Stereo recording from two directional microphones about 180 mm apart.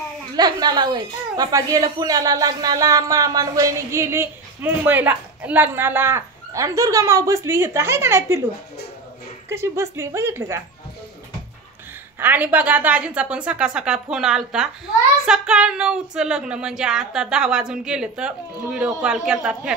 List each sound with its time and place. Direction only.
0.4 s a woman's voice: 20° right (ahead or behind)
9.5 s a woman's voice: 15° right (ahead or behind)
12.2 s a woman's voice: 10° right (ahead or behind)